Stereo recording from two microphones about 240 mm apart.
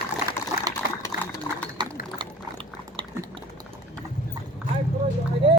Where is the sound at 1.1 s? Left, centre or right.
Left.